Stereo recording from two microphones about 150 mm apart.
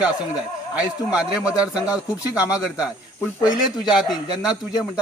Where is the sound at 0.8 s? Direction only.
5° right (ahead or behind).